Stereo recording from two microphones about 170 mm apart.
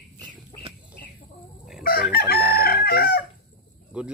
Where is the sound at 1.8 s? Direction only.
65° left (ahead or behind).